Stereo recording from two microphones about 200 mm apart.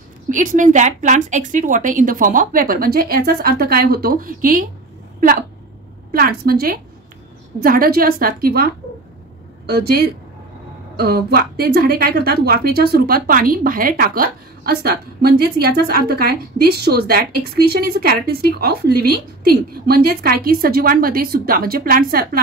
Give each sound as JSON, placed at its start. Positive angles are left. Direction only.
{"t": 0.3, "sound": "a woman's voice", "side_deg": -40}
{"t": 6.1, "sound": "a woman's voice", "side_deg": -45}
{"t": 9.7, "sound": "a woman's voice", "side_deg": -50}